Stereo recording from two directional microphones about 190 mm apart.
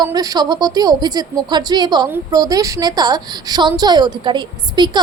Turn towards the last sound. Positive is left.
turn(degrees=-25)  # may be behind; listen again after turning